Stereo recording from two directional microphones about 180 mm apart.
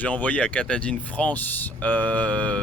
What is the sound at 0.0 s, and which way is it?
Speech, 10° left (ahead or behind).